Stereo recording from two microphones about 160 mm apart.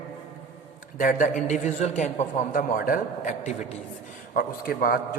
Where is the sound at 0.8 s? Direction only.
55° left (ahead or behind).